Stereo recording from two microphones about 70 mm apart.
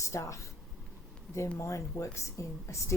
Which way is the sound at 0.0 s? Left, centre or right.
Left.